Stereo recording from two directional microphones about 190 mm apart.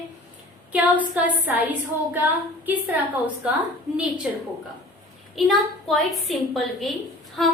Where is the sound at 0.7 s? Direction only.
10° right (ahead or behind).